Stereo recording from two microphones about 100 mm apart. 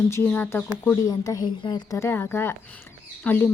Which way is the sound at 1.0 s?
40° left (ahead or behind).